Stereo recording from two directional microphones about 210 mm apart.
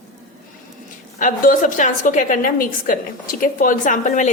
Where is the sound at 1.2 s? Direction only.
40° left (ahead or behind).